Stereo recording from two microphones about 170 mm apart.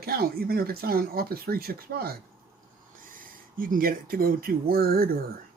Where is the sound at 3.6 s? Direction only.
55° right (ahead or behind).